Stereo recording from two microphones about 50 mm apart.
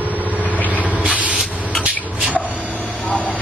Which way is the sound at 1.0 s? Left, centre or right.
Right.